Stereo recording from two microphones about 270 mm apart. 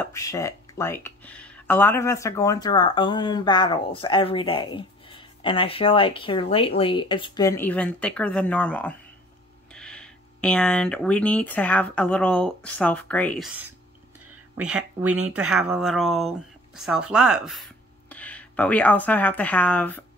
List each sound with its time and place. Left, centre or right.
0.0 s speech: centre
15.3 s speech: centre